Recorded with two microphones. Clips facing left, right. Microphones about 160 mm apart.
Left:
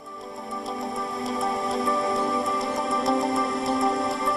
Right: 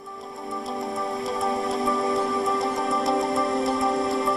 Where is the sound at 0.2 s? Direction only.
Centre (ahead or behind).